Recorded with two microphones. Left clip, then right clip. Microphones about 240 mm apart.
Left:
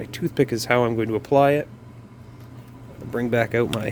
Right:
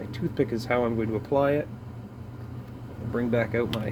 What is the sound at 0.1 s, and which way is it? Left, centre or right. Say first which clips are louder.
Speech: left 6 dB; left.